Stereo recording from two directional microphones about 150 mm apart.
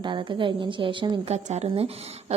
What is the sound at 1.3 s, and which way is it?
Speech, 50° right (ahead or behind).